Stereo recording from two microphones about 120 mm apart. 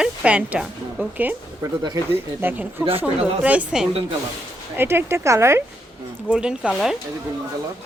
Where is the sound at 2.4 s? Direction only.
15° right (ahead or behind).